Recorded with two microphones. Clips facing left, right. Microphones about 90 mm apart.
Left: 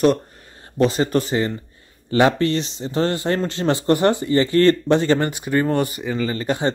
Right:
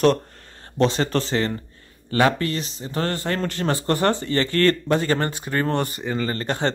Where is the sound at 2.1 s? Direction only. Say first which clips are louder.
Left 3 dB; 25° left (ahead or behind).